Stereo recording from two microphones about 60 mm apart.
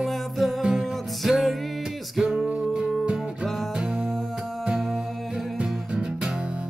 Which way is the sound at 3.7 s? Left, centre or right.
Centre.